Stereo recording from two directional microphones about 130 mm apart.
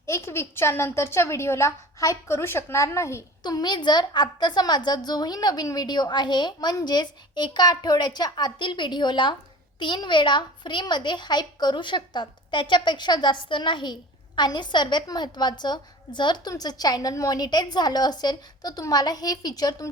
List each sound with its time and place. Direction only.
0.0 s a woman's voice: 20° left (ahead or behind)
3.4 s a woman's voice: 35° left (ahead or behind)